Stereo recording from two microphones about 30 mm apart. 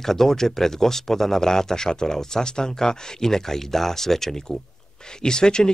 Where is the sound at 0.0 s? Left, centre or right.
Centre.